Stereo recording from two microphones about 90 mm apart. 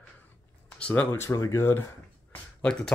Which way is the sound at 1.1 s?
30° left (ahead or behind).